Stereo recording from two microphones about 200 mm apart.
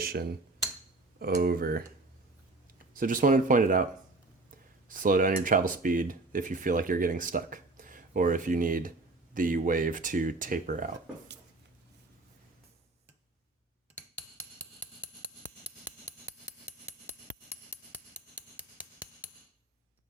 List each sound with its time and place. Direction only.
0.0 s speech: 50° right (ahead or behind)
2.9 s speech: 40° right (ahead or behind)
4.9 s speech: 40° right (ahead or behind)
18.5 s hammer: 10° right (ahead or behind)